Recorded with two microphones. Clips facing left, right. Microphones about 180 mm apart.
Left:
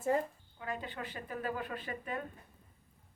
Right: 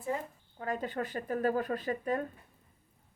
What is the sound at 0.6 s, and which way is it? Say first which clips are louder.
Speech: right 6 dB; 45° right (ahead or behind).